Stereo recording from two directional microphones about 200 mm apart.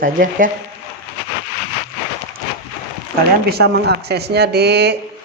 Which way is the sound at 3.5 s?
55° right (ahead or behind).